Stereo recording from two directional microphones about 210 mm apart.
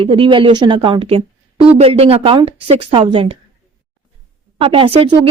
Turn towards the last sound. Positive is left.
turn(degrees=-25)  # may be behind; listen again after turning